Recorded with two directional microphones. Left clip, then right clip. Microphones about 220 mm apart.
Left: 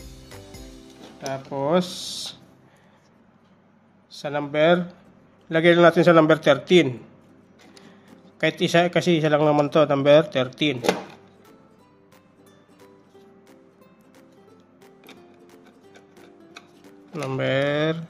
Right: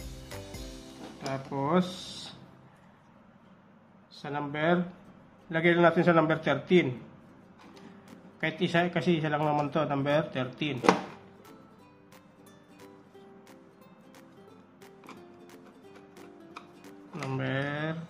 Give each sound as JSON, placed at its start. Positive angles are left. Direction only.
{"t": 0.0, "sound": "music", "side_deg": 0}
{"t": 1.3, "sound": "speech", "side_deg": 35}
{"t": 4.2, "sound": "a man's voice", "side_deg": 45}
{"t": 8.4, "sound": "a man's voice", "side_deg": 45}
{"t": 16.2, "sound": "music", "side_deg": 0}
{"t": 17.1, "sound": "speech", "side_deg": 45}